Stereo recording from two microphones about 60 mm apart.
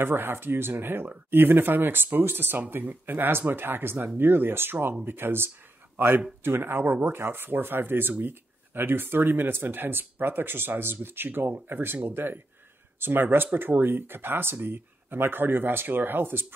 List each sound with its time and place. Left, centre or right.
0.0 s speech: right